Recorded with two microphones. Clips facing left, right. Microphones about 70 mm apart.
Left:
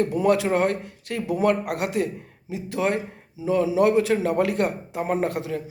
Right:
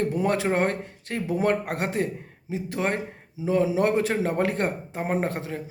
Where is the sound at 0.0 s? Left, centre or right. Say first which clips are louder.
Left 3 dB; right.